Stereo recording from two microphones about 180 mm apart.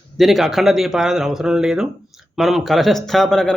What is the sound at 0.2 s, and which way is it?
Speech, centre (ahead or behind).